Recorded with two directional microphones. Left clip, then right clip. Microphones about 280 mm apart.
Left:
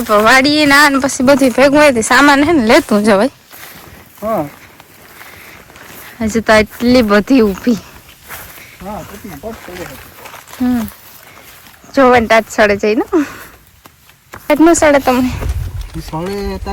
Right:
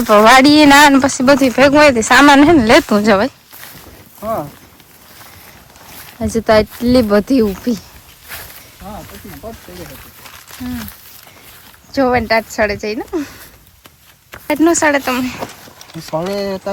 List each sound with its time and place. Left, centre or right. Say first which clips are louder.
0.1 s speech: right 2 dB; centre
6.1 s speech: left 2 dB; centre
9.7 s wild animals: left 5 dB; left
11.9 s speech: left 5 dB; centre
16.1 s speech: right 2 dB; centre